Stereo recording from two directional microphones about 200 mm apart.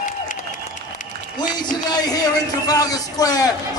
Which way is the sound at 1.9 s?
20° left (ahead or behind).